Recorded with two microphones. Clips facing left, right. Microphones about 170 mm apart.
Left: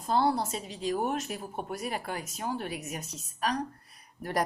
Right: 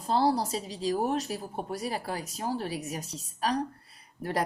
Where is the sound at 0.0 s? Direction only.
35° right (ahead or behind).